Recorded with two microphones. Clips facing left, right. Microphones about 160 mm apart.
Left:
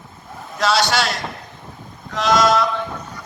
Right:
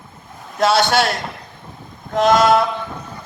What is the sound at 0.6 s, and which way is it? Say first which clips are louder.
Speech: right 3 dB; 55° right (ahead or behind).